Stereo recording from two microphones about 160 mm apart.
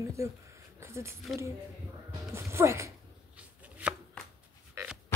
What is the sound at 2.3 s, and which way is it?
Chopping, 15° right (ahead or behind).